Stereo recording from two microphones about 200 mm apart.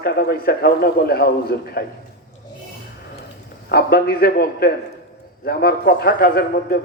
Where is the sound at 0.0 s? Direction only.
50° left (ahead or behind).